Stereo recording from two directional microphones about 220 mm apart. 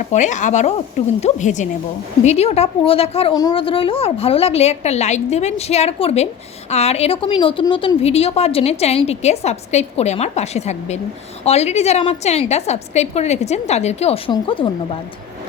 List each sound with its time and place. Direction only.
0.1 s a woman's voice: 35° left (ahead or behind)